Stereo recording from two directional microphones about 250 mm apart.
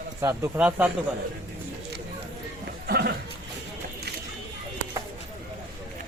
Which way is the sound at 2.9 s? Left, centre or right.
Right.